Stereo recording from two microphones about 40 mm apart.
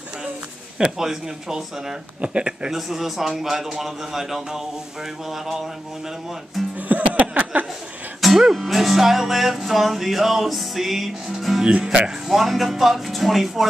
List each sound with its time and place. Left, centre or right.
0.9 s a man's voice: centre
2.2 s speech: right
2.7 s a man's voice: centre
6.9 s music: right
8.2 s music: centre
11.3 s speech: centre
11.6 s speech: centre
12.3 s music: centre